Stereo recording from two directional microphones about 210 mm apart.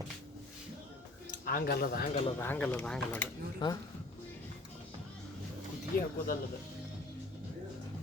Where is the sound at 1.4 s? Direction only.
45° left (ahead or behind).